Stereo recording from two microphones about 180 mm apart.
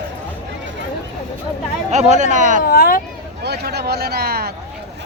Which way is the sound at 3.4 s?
60° right (ahead or behind).